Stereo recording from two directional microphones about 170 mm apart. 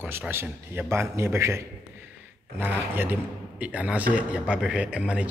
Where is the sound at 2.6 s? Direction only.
10° right (ahead or behind).